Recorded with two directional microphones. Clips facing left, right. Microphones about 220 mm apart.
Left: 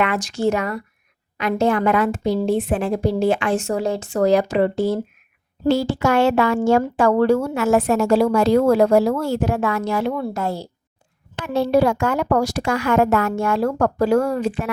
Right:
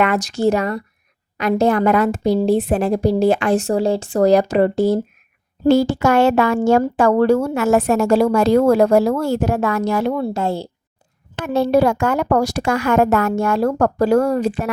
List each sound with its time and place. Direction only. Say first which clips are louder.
0.0 s a woman's voice: right 3 dB; 40° right (ahead or behind)
10.3 s a woman's voice: right 3 dB; 25° right (ahead or behind)
11.4 s a woman's voice: right 2 dB; 45° right (ahead or behind)